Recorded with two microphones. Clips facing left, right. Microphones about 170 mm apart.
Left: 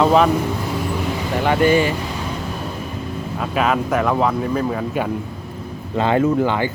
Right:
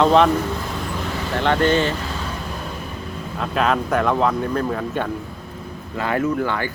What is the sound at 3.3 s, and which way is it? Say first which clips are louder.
Speech: left 1 dB; 5° left (ahead or behind).